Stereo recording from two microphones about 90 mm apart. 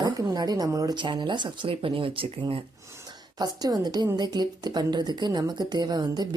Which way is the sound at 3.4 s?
50° right (ahead or behind).